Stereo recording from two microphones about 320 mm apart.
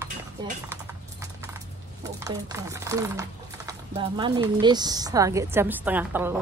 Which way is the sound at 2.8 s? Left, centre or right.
Centre.